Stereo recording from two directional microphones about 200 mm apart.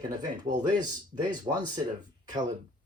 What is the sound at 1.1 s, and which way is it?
Speech, 20° right (ahead or behind).